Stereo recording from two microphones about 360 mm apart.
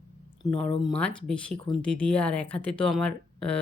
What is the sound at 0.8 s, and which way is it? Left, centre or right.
Speech, centre.